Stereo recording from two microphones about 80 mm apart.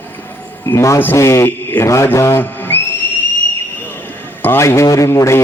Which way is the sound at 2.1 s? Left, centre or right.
Left.